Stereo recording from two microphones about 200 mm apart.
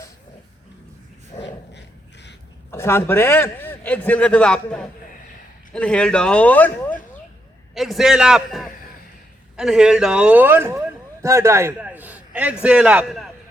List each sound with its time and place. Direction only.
2.7 s speech: 10° left (ahead or behind)